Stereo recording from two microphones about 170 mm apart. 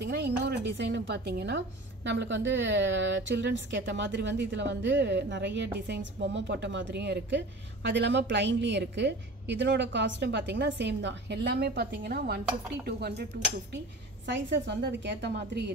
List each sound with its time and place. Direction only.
0.0 s a woman's voice: 85° right
14.2 s a woman's voice: 90° right